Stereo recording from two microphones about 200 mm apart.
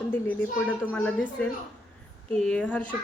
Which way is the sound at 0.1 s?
5° left (ahead or behind).